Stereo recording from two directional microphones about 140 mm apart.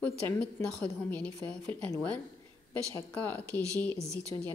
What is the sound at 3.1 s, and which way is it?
Speech, 10° left (ahead or behind).